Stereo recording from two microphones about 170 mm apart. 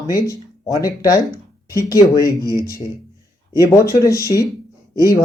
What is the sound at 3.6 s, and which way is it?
A man's voice, 20° left (ahead or behind).